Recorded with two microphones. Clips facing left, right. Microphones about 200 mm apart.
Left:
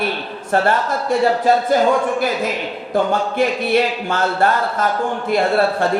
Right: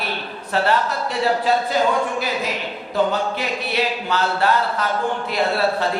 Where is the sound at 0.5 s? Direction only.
50° left (ahead or behind).